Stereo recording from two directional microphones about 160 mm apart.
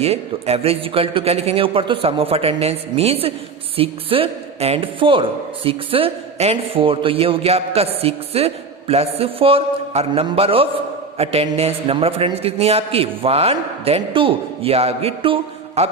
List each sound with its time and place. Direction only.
0.0 s a man's voice: 40° right (ahead or behind)